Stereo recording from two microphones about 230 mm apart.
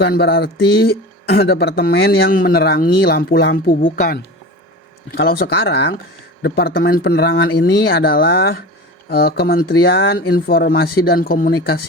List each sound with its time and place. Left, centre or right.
0.0 s speech: left